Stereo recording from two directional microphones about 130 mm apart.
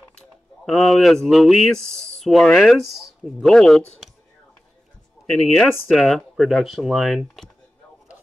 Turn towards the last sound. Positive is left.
turn(degrees=0)  # may be behind; listen again after turning